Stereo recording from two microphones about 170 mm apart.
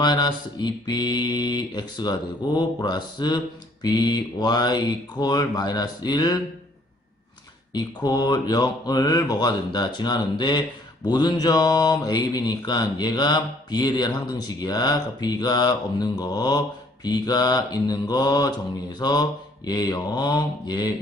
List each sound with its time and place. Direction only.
0.0 s mantra: 25° left (ahead or behind)
7.7 s mantra: 25° left (ahead or behind)